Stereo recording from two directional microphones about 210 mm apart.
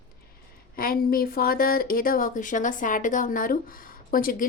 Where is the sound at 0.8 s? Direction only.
45° left (ahead or behind).